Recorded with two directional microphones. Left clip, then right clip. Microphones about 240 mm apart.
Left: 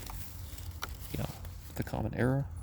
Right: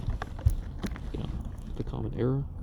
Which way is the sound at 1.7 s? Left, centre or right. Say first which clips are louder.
Even; left.